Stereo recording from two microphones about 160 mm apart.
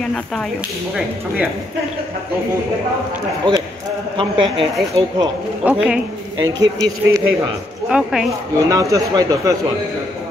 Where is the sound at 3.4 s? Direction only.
30° right (ahead or behind).